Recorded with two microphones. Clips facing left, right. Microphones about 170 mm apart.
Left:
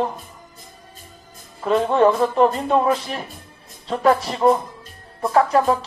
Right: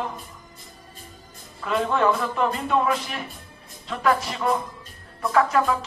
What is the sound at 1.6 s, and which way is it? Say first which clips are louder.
A man's voice: left 6 dB; 35° left (ahead or behind).